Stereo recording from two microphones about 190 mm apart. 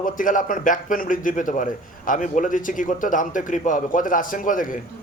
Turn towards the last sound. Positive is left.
turn(degrees=45)  # may be behind; listen again after turning